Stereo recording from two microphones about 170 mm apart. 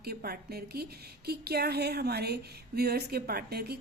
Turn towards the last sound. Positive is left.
turn(degrees=-65)  # may be behind; listen again after turning